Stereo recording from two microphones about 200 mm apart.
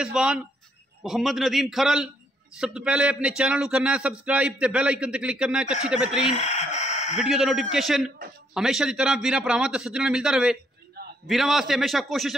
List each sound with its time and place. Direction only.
0.0 s a man's voice: 5° right (ahead or behind)
6.3 s chicken: 35° left (ahead or behind)
7.2 s a man's voice: centre (ahead or behind)